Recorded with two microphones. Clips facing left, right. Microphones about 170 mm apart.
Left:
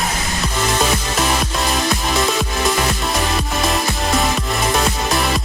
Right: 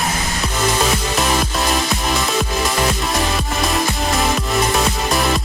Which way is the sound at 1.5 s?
Centre (ahead or behind).